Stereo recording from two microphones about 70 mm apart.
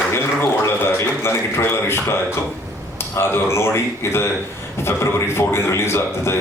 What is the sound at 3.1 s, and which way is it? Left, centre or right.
A man's voice, left.